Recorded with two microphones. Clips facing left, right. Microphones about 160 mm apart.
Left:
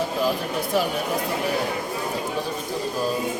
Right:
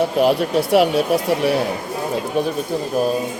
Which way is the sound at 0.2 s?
75° right (ahead or behind).